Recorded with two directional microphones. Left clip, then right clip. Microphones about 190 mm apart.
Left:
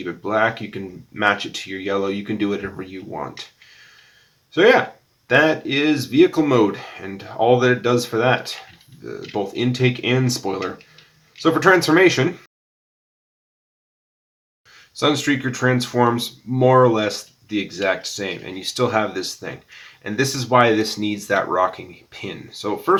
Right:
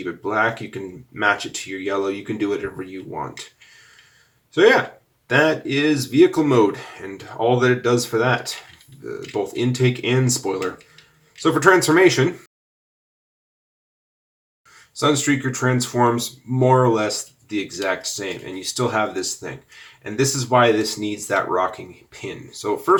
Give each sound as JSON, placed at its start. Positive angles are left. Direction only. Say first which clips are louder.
{"t": 0.0, "sound": "speech", "louder": "left 1 dB", "side_deg": 30}
{"t": 4.5, "sound": "speech", "louder": "left 1 dB", "side_deg": 30}
{"t": 14.9, "sound": "speech", "louder": "even", "side_deg": 30}